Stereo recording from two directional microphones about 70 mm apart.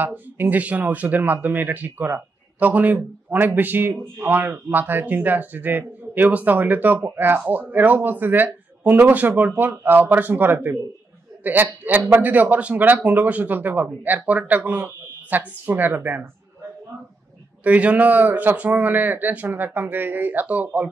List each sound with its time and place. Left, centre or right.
0.0 s speech: right
17.6 s speech: right